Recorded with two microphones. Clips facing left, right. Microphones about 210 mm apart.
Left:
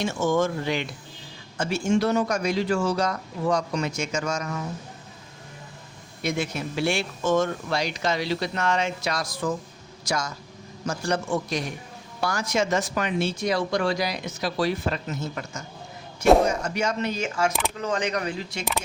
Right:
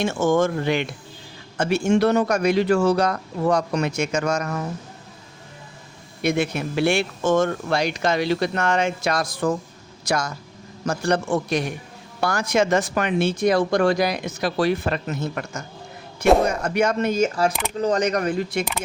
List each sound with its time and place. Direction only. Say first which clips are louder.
0.0 s speech: right 4 dB; 50° right (ahead or behind)
6.2 s speech: right 5 dB; 60° right (ahead or behind)